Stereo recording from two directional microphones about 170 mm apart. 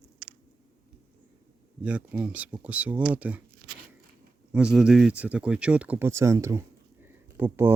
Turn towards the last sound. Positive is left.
turn(degrees=-15)  # may be behind; listen again after turning